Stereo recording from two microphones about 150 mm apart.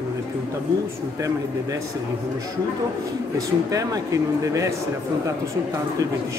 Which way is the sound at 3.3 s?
20° right (ahead or behind).